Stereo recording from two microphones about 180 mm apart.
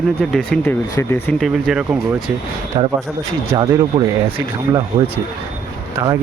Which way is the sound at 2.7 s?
25° right (ahead or behind).